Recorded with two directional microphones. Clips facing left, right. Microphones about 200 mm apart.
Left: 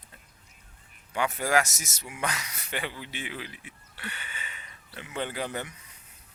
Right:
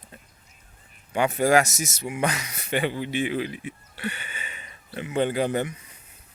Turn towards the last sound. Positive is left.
turn(degrees=-20)  # may be behind; listen again after turning